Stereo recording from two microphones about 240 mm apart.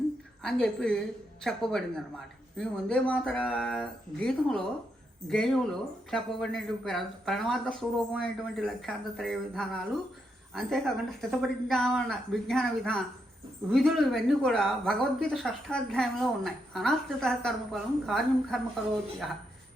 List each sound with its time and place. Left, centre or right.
0.4 s a woman's voice: centre